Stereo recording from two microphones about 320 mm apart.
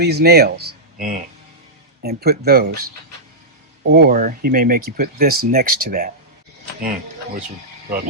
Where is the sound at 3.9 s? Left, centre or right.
Right.